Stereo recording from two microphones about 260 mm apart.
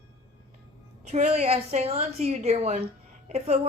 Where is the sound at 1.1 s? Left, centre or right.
Right.